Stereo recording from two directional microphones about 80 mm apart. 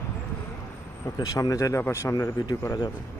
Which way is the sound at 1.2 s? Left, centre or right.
Left.